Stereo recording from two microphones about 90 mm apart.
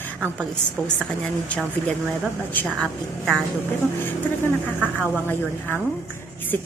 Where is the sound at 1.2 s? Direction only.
15° left (ahead or behind).